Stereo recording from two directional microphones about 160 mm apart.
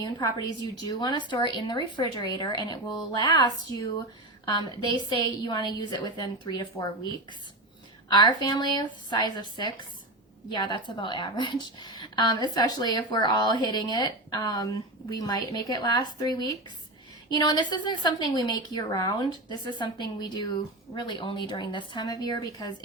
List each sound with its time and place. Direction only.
0.0 s a woman's voice: 25° left (ahead or behind)
8.1 s a woman's voice: 25° left (ahead or behind)